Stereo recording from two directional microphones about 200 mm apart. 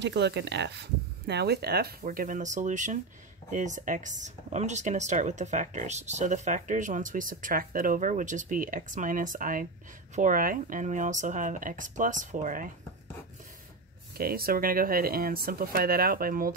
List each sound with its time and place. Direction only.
0.0 s speech: 60° right (ahead or behind); by 12.7 s 40° right (ahead or behind)
14.1 s speech: 50° right (ahead or behind)